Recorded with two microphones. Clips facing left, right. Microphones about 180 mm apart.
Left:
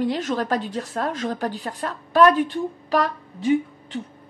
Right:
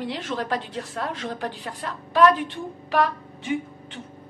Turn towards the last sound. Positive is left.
turn(degrees=35)  # may be behind; listen again after turning